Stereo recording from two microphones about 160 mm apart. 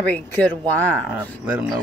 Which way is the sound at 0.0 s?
10° left (ahead or behind).